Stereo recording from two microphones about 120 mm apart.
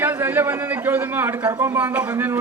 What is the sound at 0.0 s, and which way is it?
A man's voice, 15° right (ahead or behind).